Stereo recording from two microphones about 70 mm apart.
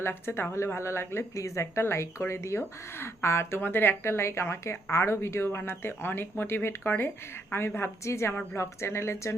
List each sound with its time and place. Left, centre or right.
0.0 s speech: left